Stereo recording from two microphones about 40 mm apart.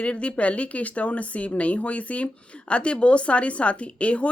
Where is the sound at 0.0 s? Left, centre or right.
Left.